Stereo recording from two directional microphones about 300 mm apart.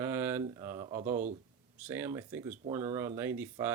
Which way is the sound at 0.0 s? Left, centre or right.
Centre.